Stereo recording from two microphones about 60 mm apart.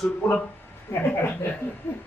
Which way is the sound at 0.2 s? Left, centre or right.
Centre.